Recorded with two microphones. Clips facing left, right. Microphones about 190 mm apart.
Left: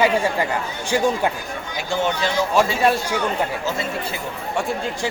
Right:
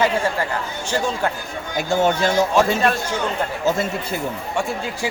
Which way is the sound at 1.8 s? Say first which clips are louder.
Right 4 dB; 45° right (ahead or behind).